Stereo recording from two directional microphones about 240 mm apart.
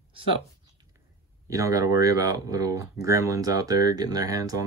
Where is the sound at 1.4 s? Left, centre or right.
Centre.